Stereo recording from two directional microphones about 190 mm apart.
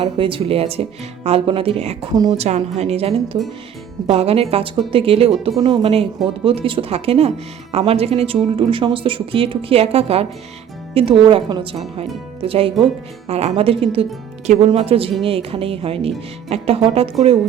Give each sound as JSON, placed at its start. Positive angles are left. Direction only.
{"t": 0.0, "sound": "a woman's voice", "side_deg": -25}